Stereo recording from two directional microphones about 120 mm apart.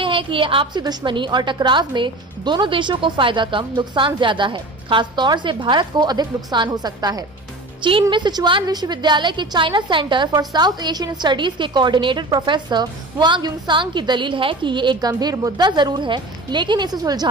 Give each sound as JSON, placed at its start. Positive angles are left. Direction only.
{"t": 0.0, "sound": "a woman's voice", "side_deg": -45}